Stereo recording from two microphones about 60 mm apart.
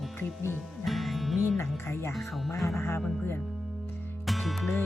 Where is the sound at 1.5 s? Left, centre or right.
Left.